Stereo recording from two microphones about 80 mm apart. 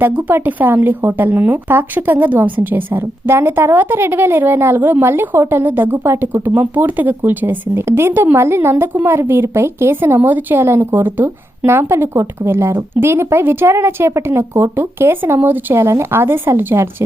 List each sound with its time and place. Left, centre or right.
0.0 s speech: right